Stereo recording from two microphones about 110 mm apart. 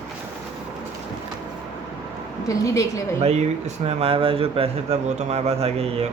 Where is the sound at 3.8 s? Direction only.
60° right (ahead or behind).